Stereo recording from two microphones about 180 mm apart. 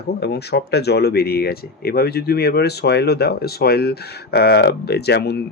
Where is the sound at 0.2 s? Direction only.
65° left (ahead or behind).